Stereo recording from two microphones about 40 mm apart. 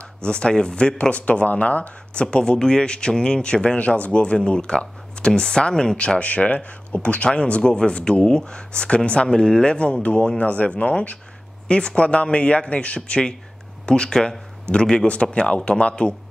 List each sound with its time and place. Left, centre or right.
0.2 s speech: left
2.2 s speech: centre; by 11.1 s left
11.6 s speech: left